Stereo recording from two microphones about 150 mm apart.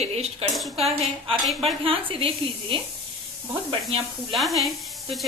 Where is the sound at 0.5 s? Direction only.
Centre (ahead or behind).